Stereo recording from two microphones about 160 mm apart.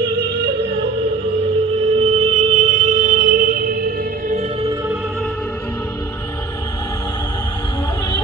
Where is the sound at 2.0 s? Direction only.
45° right (ahead or behind); by 4.4 s 65° right (ahead or behind).